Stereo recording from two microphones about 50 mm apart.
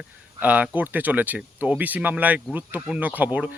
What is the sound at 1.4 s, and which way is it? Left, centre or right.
Speech, right.